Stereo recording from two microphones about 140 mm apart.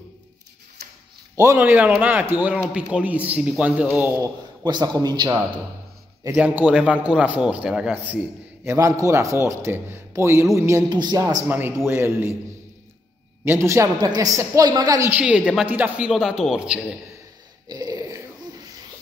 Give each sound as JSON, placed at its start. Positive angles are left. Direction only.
{"t": 1.3, "sound": "a man's voice", "side_deg": -20}
{"t": 4.6, "sound": "a man's voice", "side_deg": -30}
{"t": 6.2, "sound": "a man's voice", "side_deg": -15}
{"t": 10.9, "sound": "a man's voice", "side_deg": -30}
{"t": 11.4, "sound": "a man's voice", "side_deg": -15}
{"t": 13.5, "sound": "a man's voice", "side_deg": -20}
{"t": 15.1, "sound": "a man's voice", "side_deg": -10}
{"t": 17.6, "sound": "a sound", "side_deg": -25}